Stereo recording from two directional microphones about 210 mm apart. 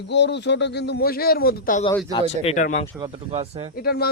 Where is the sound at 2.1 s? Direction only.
30° left (ahead or behind).